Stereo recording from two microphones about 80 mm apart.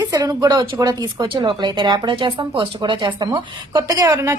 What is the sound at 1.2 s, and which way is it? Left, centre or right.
Speech, right.